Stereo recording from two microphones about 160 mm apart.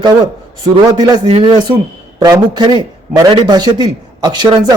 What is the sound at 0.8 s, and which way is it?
Speech, 25° right (ahead or behind).